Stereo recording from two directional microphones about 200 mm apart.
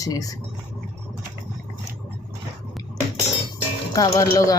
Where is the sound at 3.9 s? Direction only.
15° left (ahead or behind).